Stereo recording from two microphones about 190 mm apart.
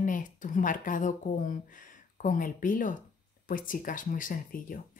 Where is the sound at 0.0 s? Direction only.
45° left (ahead or behind).